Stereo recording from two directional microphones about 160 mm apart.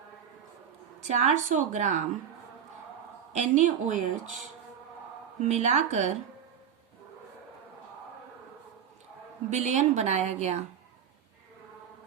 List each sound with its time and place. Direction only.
1.0 s a woman's voice: 45° right (ahead or behind)
3.3 s a woman's voice: 50° right (ahead or behind)
5.4 s a woman's voice: 45° right (ahead or behind)
9.5 s a woman's voice: 45° right (ahead or behind)